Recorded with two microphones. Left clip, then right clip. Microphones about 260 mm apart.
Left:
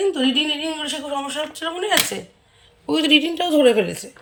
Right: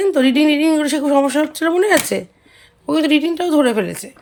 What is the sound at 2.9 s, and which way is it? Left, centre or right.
Speech, centre.